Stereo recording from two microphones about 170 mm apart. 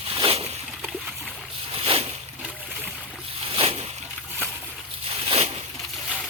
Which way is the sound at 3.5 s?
35° right (ahead or behind).